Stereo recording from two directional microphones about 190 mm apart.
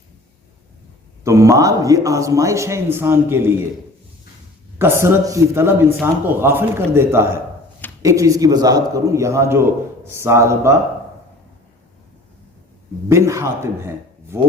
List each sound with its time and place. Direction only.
1.2 s a man's voice: 15° right (ahead or behind)
4.8 s a man's voice: 15° right (ahead or behind)
13.1 s a man's voice: 15° right (ahead or behind)